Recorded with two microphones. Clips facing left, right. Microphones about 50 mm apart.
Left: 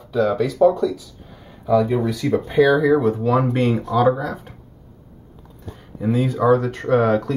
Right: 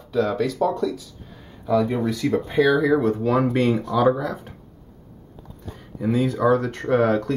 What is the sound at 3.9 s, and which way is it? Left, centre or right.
Speech, centre.